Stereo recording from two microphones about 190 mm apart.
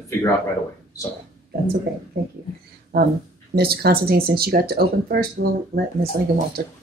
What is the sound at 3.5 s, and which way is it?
Speech, 55° right (ahead or behind).